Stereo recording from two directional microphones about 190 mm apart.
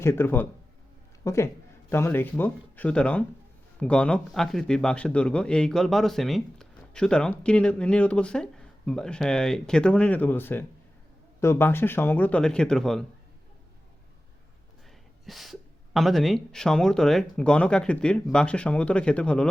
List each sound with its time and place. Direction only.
0.0 s a man's voice: 10° left (ahead or behind)
15.3 s a man's voice: centre (ahead or behind)